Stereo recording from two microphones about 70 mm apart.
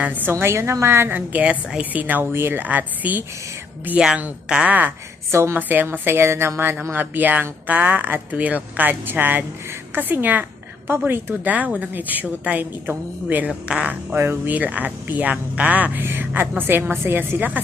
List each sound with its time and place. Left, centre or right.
0.0 s a woman's voice: right
1.4 s speech: centre
3.9 s a woman's voice: centre
5.3 s a woman's voice: right
5.5 s a woman's voice: right
14.2 s speech: right